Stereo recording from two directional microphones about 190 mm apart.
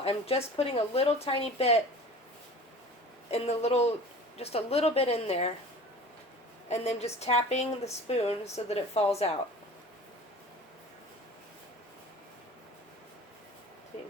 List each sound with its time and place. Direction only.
0.0 s speech: 30° left (ahead or behind)
3.2 s speech: 35° left (ahead or behind)
6.7 s speech: 35° left (ahead or behind)